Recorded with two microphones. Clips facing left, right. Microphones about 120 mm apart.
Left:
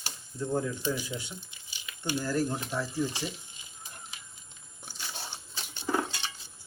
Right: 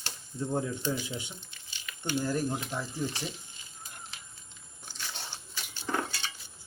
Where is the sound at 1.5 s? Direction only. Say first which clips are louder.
Right 1 dB; 15° left (ahead or behind).